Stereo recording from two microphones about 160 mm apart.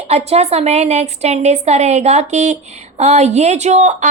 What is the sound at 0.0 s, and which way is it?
A woman's voice, 40° right (ahead or behind).